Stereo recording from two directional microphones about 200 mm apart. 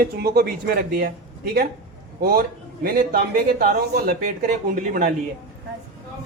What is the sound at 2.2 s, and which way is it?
Speech, 50° right (ahead or behind).